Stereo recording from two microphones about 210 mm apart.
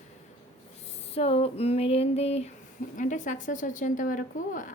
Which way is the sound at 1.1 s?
30° left (ahead or behind).